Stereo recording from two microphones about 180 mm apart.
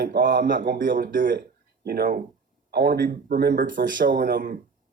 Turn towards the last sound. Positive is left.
turn(degrees=-60)  # may be behind; listen again after turning